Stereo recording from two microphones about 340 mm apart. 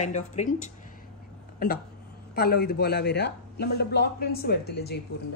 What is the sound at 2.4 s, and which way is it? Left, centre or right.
Speech, left.